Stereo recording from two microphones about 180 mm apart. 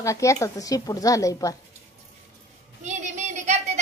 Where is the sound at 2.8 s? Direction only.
40° right (ahead or behind).